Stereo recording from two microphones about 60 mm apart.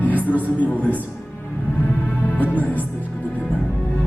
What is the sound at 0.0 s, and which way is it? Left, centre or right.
Speech, left.